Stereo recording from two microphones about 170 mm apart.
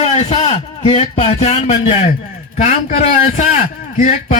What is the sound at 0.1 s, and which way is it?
A man's voice, 40° left (ahead or behind).